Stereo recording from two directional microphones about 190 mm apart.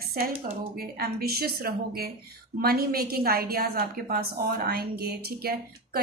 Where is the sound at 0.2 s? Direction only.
50° right (ahead or behind).